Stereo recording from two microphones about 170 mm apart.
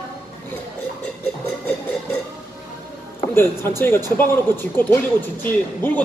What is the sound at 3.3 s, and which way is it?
Speech, 15° left (ahead or behind).